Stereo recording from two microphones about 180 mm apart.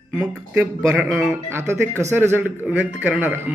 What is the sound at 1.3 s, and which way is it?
A man's voice, 15° right (ahead or behind).